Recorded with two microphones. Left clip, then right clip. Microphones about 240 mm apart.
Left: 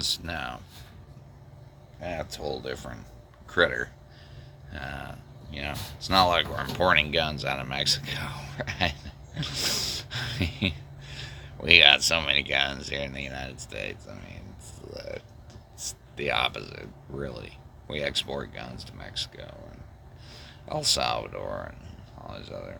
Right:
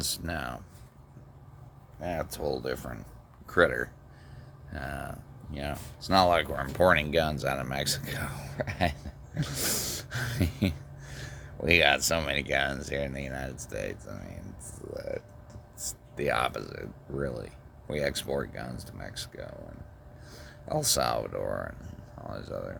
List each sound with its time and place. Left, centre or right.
0.0 s speech: right
2.0 s speech: right